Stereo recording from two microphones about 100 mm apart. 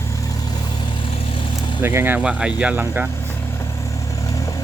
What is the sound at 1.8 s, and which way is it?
Speech, 20° right (ahead or behind).